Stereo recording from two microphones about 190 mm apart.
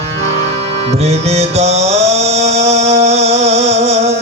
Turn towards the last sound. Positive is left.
turn(degrees=-35)  # may be behind; listen again after turning